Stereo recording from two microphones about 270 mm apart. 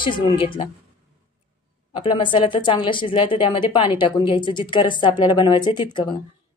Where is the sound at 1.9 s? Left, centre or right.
Centre.